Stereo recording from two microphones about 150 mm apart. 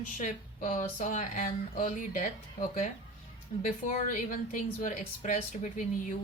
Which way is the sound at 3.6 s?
60° left (ahead or behind).